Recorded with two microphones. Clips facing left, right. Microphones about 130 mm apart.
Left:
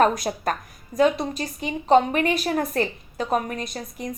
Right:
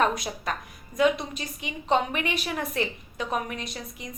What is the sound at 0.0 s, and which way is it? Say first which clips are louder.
A woman's voice: left 5 dB; 40° left (ahead or behind).